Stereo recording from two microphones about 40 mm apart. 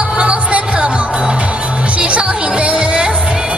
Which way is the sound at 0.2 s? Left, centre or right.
Right.